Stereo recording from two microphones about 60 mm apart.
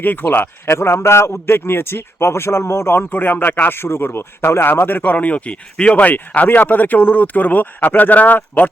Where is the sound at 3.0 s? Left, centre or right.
Left.